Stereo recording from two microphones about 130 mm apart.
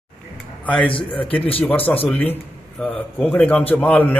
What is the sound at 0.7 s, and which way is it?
Speech, 10° left (ahead or behind).